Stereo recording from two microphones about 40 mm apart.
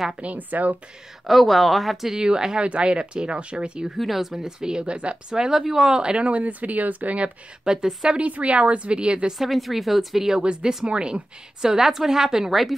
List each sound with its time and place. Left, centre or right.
0.2 s a woman's voice: right
1.2 s speech: centre
2.1 s speech: centre
4.0 s speech: centre
4.4 s a woman's voice: centre; by 7.3 s right
7.6 s a woman's voice: centre
8.1 s speech: right
9.4 s speech: centre
10.4 s a woman's voice: right
12.4 s speech: centre